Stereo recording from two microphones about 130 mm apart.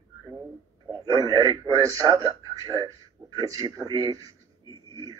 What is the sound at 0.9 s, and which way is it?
A man's voice, 30° right (ahead or behind).